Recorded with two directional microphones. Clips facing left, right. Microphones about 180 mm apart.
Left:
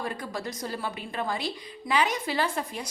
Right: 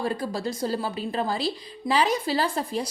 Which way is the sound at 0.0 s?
30° right (ahead or behind).